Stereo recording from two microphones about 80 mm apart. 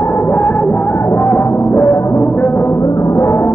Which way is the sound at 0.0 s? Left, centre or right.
Left.